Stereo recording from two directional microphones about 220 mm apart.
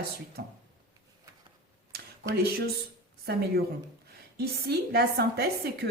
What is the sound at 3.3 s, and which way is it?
Speech, 45° right (ahead or behind).